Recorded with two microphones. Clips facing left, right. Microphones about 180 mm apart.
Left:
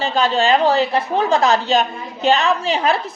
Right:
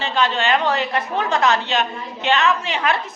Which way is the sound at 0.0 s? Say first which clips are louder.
Left 3 dB; 35° left (ahead or behind).